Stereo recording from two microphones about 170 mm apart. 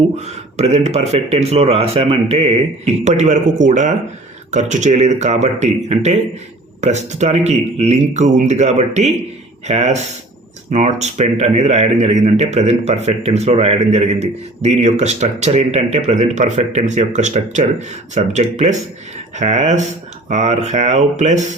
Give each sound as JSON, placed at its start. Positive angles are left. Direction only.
{"t": 0.2, "sound": "a man's voice", "side_deg": -40}